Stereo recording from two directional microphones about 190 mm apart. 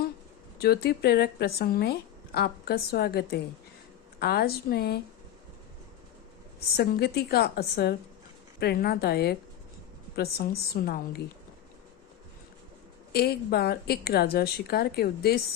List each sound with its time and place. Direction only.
0.6 s a woman's voice: 55° left (ahead or behind)
6.7 s a woman's voice: 55° left (ahead or behind)
13.1 s a woman's voice: 55° left (ahead or behind)